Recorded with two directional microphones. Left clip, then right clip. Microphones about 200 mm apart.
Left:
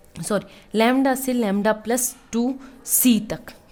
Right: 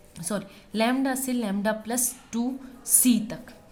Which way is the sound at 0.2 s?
35° left (ahead or behind).